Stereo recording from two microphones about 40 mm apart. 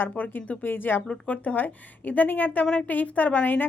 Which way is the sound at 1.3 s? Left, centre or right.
Left.